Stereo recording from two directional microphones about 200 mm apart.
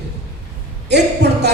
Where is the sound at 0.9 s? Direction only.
55° right (ahead or behind).